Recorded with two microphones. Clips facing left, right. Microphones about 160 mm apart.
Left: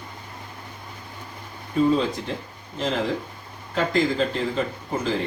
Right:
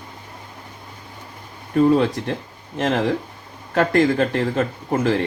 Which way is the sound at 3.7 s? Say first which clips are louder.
Right 5 dB; 65° right (ahead or behind).